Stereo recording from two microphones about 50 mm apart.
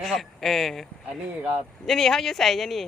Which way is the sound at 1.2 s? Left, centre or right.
Right.